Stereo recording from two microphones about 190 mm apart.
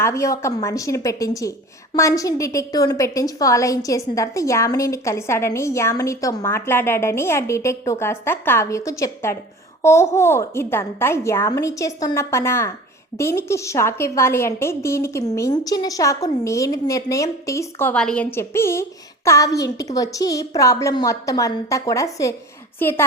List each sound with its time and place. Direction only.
0.0 s a woman's voice: 15° left (ahead or behind)